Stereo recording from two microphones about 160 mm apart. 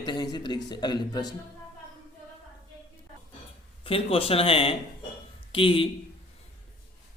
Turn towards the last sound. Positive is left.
turn(degrees=35)  # may be behind; listen again after turning